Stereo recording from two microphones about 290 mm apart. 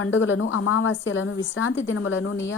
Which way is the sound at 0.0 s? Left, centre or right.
Left.